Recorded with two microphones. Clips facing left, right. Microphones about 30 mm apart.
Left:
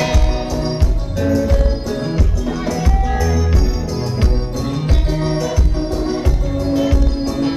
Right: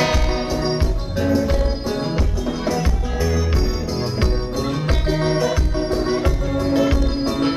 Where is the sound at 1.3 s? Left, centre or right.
Centre.